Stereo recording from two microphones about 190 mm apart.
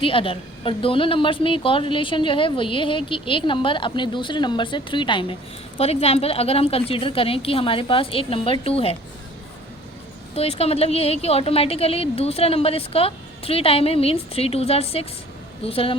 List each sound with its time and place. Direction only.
0.0 s a woman's voice: 30° left (ahead or behind)
10.3 s a woman's voice: 30° left (ahead or behind)